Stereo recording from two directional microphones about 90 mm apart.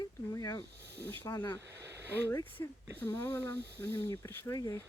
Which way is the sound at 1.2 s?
25° left (ahead or behind).